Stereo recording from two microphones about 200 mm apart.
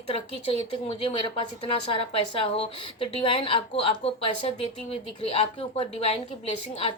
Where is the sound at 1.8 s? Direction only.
25° left (ahead or behind).